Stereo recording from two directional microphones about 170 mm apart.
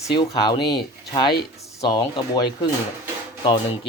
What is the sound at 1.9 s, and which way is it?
Speech, 25° left (ahead or behind).